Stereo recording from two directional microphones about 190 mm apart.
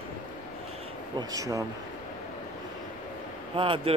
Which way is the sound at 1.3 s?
20° right (ahead or behind).